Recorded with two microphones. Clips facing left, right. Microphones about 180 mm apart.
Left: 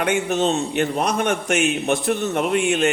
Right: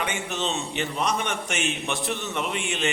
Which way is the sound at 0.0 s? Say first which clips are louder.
Left 9 dB; 50° left (ahead or behind).